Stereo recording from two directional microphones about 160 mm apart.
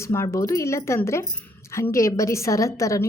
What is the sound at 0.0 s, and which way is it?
A woman's voice, 15° left (ahead or behind).